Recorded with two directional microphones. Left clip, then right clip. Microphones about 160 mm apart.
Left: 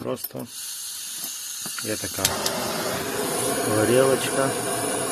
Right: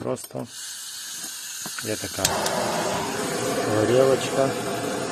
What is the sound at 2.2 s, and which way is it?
Speech, 30° right (ahead or behind).